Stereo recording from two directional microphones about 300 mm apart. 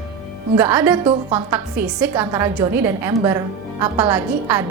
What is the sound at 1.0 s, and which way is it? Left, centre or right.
Speech, centre.